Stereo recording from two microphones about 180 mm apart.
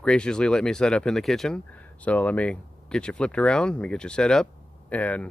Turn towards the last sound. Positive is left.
turn(degrees=10)  # may be behind; listen again after turning